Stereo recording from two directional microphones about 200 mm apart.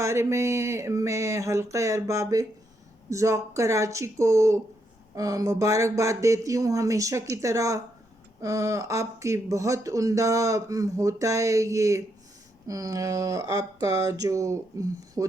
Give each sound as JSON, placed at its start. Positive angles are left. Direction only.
{"t": 0.0, "sound": "speech", "side_deg": -15}